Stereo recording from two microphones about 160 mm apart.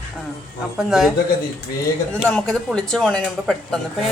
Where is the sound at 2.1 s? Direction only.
5° left (ahead or behind).